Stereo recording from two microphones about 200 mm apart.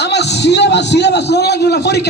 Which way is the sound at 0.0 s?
60° left (ahead or behind).